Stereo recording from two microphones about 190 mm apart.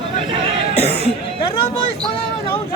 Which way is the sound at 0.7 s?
35° left (ahead or behind).